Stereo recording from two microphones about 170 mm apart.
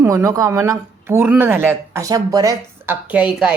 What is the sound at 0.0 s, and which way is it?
Speech, 20° right (ahead or behind).